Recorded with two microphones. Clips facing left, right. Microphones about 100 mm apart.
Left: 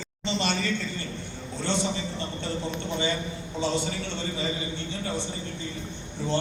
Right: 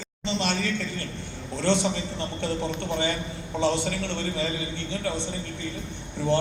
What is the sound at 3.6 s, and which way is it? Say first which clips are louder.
Speech: right 4 dB; 75° right (ahead or behind).